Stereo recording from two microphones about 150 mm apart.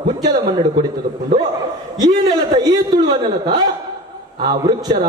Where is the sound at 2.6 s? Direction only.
25° right (ahead or behind).